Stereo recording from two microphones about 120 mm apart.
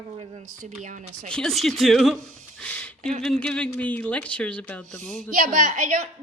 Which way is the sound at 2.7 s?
10° left (ahead or behind).